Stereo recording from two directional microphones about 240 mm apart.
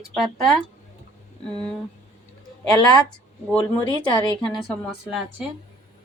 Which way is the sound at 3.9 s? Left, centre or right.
Centre.